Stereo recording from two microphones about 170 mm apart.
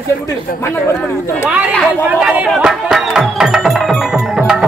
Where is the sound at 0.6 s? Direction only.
15° left (ahead or behind).